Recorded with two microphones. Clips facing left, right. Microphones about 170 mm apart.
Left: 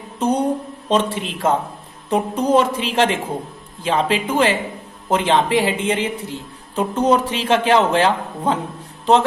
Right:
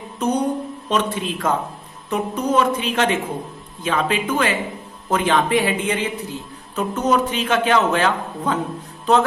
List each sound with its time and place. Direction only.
0.2 s mantra: 30° left (ahead or behind)
0.9 s a man's voice: 30° left (ahead or behind)